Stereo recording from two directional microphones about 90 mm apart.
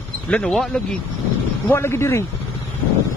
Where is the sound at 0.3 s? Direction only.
10° left (ahead or behind).